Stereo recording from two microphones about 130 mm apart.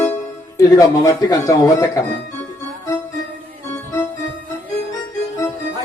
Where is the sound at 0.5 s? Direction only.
25° left (ahead or behind).